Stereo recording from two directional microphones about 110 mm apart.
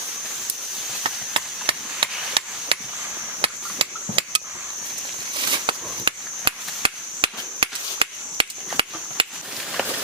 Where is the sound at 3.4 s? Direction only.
55° right (ahead or behind).